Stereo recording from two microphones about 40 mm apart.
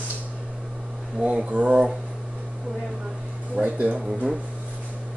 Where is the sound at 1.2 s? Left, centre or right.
Right.